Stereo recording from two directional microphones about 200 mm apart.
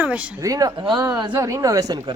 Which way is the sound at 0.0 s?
10° right (ahead or behind).